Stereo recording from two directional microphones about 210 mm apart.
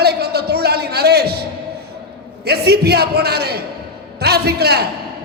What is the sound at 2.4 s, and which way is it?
A man's voice, 50° right (ahead or behind).